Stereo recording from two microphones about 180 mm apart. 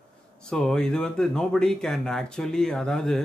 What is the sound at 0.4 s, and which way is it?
Speech, 5° left (ahead or behind).